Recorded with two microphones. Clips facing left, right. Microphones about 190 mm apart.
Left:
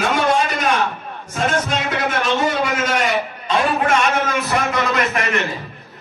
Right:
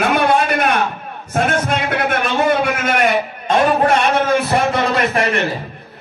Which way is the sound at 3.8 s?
35° right (ahead or behind).